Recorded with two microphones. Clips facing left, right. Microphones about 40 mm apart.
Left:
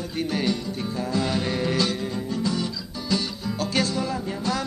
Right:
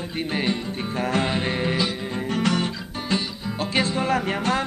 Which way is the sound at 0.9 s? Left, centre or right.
Right.